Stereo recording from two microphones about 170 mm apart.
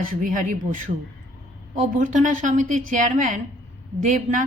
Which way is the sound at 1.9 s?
45° right (ahead or behind).